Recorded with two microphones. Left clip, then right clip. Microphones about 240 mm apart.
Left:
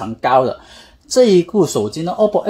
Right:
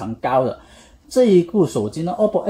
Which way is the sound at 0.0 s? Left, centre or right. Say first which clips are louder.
Left 5 dB; left.